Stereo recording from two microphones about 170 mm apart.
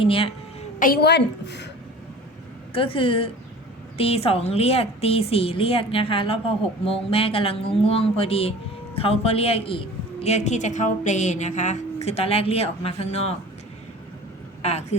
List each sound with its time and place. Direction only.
0.0 s a woman's voice: 35° left (ahead or behind)
0.8 s a woman's voice: 65° left (ahead or behind); by 1.7 s 90° left
2.7 s a woman's voice: 30° left (ahead or behind)
14.6 s speech: 40° left (ahead or behind)